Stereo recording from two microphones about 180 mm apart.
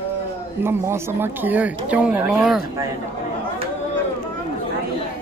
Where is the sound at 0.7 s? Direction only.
15° right (ahead or behind).